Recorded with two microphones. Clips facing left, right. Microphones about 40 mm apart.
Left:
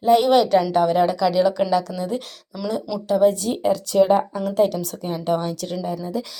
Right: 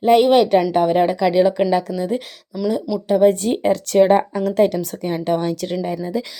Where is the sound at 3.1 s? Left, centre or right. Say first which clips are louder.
Right 3 dB; right.